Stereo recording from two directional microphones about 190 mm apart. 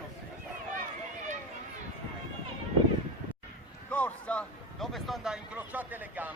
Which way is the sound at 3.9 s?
5° left (ahead or behind).